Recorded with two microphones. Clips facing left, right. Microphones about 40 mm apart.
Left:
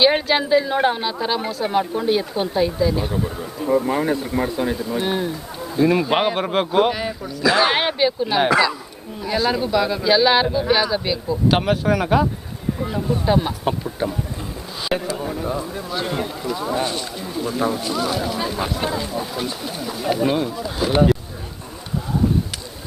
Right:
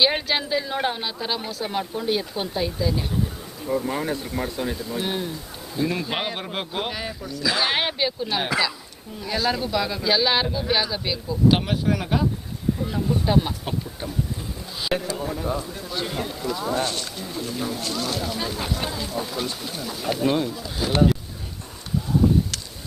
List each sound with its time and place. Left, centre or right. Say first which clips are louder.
0.0 s speech: left 5 dB; centre
3.1 s speech: left 4 dB; left